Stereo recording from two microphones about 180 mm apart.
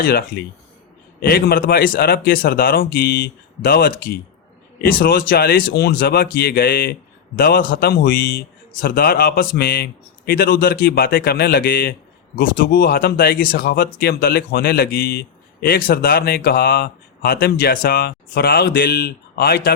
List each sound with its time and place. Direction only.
0.0 s speech: 55° left (ahead or behind)